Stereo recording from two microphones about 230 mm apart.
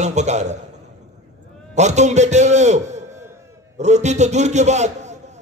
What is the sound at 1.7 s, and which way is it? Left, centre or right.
A man's voice, right.